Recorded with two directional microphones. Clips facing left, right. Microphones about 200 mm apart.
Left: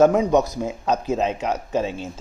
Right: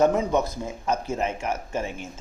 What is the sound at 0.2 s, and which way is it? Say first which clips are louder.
Speech: left 5 dB; 20° left (ahead or behind).